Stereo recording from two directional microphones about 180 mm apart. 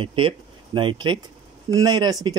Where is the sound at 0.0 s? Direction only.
30° right (ahead or behind).